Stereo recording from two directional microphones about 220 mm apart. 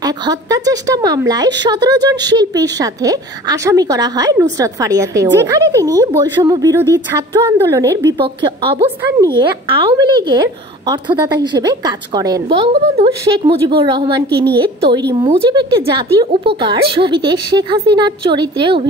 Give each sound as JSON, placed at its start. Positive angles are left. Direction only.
{"t": 0.0, "sound": "a woman's voice", "side_deg": -15}
{"t": 9.2, "sound": "speech", "side_deg": -20}